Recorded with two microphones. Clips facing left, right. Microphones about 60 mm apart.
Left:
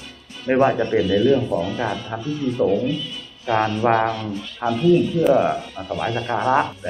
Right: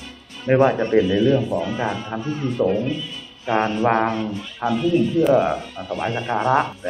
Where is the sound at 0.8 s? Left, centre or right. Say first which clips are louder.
Right 1 dB; centre.